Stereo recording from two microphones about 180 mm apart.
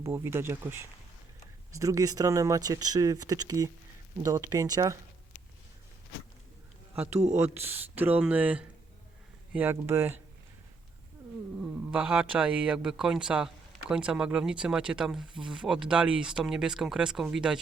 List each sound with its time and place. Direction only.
0.0 s speech: 15° right (ahead or behind)
7.1 s speech: 35° right (ahead or behind)
7.3 s speech: 15° right (ahead or behind)
11.9 s speech: 5° right (ahead or behind)